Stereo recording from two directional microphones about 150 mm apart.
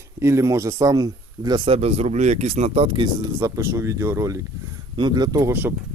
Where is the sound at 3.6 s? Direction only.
20° right (ahead or behind).